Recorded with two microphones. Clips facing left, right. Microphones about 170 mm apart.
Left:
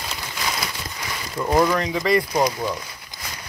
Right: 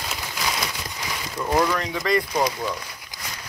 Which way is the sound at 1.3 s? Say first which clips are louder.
Left 3 dB; 10° left (ahead or behind).